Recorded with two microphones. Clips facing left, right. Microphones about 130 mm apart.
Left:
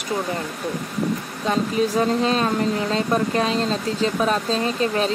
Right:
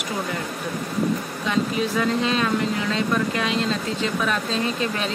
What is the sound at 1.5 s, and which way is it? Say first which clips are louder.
Speech: left 3 dB; 35° left (ahead or behind).